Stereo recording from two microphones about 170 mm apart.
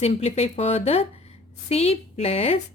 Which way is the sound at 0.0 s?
40° left (ahead or behind).